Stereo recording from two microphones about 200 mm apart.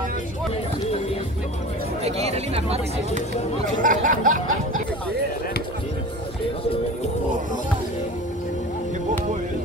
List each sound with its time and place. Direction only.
2.0 s chatter: 30° right (ahead or behind)
3.8 s speech: 40° right (ahead or behind)